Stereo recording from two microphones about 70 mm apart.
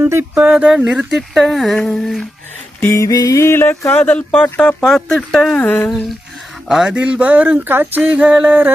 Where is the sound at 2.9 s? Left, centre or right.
Left.